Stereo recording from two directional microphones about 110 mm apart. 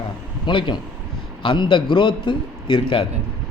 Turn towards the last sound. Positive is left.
turn(degrees=50)  # may be behind; listen again after turning